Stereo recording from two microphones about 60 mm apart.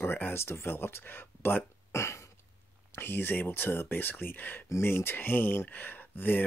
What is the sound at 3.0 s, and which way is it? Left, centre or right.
Speech, left.